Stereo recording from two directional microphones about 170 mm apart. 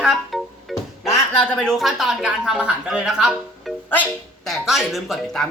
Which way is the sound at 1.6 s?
Centre (ahead or behind).